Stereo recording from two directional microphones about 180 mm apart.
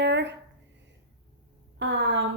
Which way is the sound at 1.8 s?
85° right.